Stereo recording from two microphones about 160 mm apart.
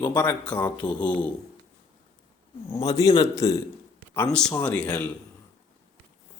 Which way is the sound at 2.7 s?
20° left (ahead or behind).